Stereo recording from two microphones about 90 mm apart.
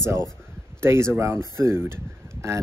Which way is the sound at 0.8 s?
30° right (ahead or behind).